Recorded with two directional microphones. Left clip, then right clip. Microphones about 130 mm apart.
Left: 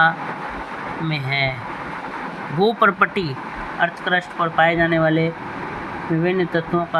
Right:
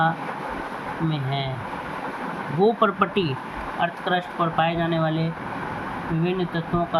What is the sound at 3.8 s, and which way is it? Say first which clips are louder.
Speech: left 4 dB; 50° left (ahead or behind).